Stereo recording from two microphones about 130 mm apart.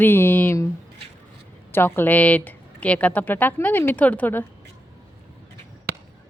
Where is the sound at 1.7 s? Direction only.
15° left (ahead or behind).